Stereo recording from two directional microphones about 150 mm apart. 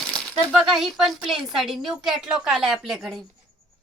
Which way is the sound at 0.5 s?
Centre (ahead or behind).